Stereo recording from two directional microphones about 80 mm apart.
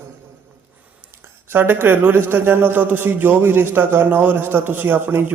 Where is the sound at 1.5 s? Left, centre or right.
Right.